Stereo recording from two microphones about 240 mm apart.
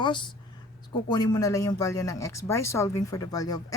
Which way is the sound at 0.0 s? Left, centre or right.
Centre.